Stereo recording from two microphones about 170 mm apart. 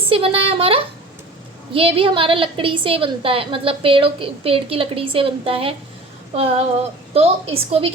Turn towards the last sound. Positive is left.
turn(degrees=-35)  # may be behind; listen again after turning